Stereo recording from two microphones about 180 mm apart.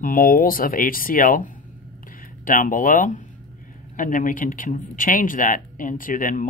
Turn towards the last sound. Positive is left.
turn(degrees=45)  # may be behind; listen again after turning